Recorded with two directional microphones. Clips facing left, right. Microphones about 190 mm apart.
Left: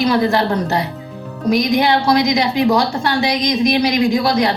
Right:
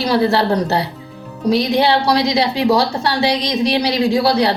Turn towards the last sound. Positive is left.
turn(degrees=-35)  # may be behind; listen again after turning